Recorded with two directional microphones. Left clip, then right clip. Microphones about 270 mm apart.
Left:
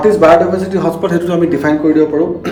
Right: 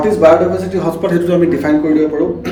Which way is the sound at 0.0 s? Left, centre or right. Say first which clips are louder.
Left 2 dB; centre.